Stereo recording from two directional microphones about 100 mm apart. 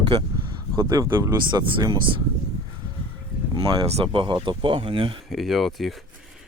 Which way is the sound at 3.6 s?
70° right (ahead or behind).